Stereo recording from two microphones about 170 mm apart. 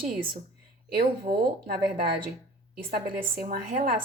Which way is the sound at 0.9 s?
65° right (ahead or behind).